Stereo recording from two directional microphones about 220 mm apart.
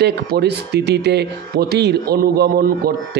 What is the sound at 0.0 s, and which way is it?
Speech, 50° right (ahead or behind).